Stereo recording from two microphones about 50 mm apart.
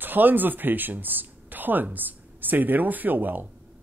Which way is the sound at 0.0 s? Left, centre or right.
Right.